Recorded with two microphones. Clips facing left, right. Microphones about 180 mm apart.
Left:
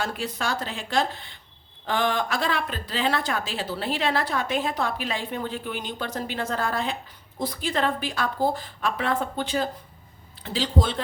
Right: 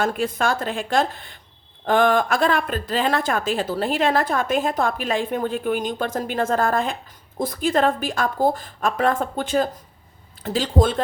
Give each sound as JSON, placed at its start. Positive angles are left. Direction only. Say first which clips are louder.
{"t": 0.0, "sound": "speech", "louder": "right 7 dB", "side_deg": -50}